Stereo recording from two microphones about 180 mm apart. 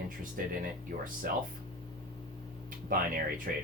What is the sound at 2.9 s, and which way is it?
Speech, 50° right (ahead or behind).